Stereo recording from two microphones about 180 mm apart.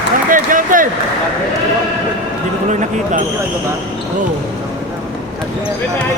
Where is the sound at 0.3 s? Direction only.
50° right (ahead or behind).